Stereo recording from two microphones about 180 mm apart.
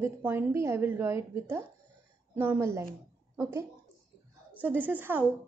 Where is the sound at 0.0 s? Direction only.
10° right (ahead or behind).